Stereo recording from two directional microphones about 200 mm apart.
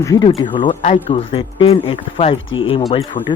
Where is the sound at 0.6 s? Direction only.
40° left (ahead or behind).